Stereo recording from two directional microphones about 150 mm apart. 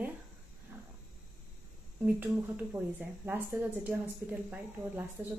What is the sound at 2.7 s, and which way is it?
A woman's voice, 15° right (ahead or behind).